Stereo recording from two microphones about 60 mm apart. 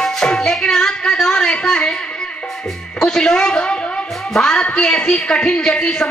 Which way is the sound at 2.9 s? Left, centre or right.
Centre.